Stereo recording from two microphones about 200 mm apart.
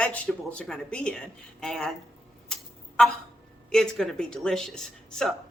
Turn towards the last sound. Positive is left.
turn(degrees=5)  # may be behind; listen again after turning